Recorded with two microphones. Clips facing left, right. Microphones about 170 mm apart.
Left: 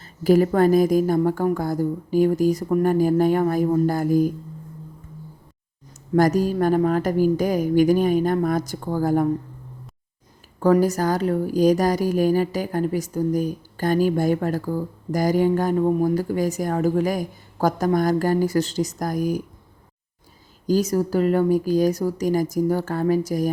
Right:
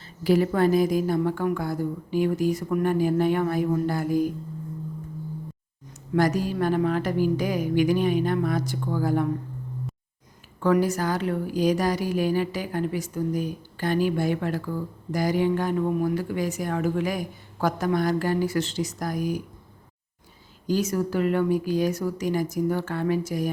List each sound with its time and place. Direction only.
0.0 s a woman's voice: 45° left (ahead or behind)
6.1 s speech: 45° left (ahead or behind)
10.6 s a woman's voice: 40° left (ahead or behind)
20.7 s a woman's voice: 40° left (ahead or behind)